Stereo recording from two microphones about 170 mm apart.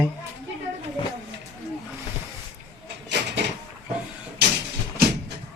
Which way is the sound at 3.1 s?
90° right.